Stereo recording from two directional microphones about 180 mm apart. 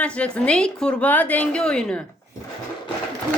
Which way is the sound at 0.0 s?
5° left (ahead or behind).